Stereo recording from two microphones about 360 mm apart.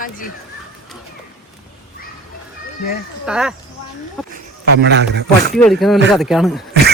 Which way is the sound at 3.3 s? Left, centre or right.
Centre.